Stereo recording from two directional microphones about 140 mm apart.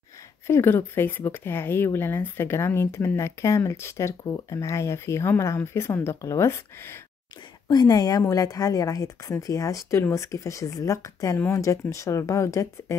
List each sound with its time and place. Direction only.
0.5 s a woman's voice: 15° left (ahead or behind)